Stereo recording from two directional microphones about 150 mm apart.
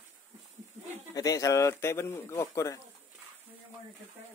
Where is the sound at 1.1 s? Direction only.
25° left (ahead or behind).